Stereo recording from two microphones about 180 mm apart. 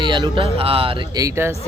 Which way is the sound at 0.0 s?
25° right (ahead or behind).